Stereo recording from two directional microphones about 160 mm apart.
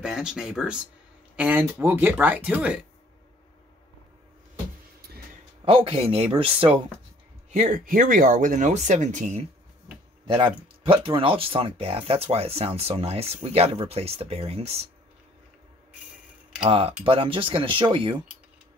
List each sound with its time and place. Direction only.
0.0 s speech: 5° right (ahead or behind)
5.7 s speech: 35° right (ahead or behind)
7.5 s speech: 50° right (ahead or behind)
10.2 s speech: 30° right (ahead or behind)
16.6 s speech: 35° right (ahead or behind)